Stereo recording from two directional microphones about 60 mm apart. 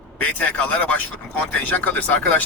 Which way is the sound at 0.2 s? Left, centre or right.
Left.